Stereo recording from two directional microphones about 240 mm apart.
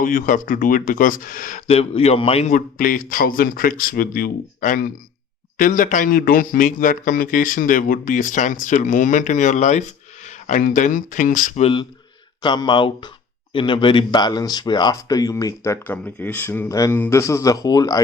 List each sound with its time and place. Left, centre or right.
0.0 s a man's voice: left; by 18.0 s centre